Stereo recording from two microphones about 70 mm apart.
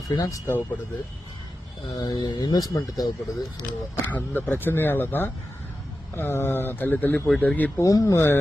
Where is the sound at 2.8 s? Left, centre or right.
Left.